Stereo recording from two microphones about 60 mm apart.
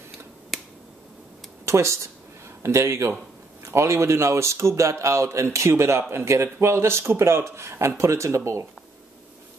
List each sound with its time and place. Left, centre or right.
0.5 s finger snapping: centre
1.7 s speech: right